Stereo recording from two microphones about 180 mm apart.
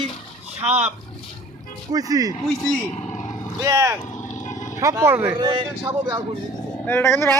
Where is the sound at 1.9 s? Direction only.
20° right (ahead or behind).